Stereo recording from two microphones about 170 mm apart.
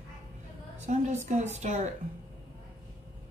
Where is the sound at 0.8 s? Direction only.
40° right (ahead or behind).